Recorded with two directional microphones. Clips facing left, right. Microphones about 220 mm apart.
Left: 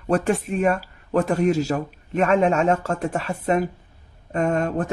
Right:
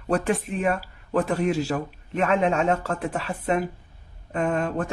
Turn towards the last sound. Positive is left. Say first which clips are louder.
# left 3 dB
turn(degrees=45)  # may be behind; listen again after turning